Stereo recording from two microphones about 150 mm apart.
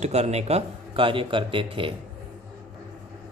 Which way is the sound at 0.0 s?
45° right (ahead or behind).